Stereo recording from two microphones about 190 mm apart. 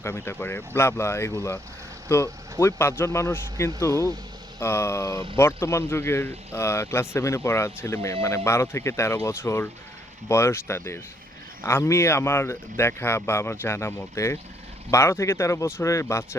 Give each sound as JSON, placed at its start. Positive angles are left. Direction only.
{"t": 0.0, "sound": "speech", "side_deg": 10}